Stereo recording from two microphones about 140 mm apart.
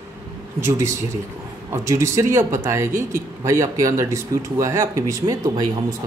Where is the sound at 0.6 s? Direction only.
20° right (ahead or behind).